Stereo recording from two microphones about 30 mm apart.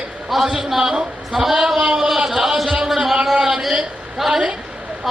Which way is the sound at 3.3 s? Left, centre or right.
Right.